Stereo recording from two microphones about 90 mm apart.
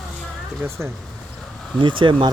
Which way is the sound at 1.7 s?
65° right (ahead or behind).